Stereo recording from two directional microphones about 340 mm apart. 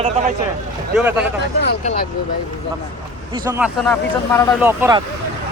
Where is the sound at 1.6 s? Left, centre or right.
Centre.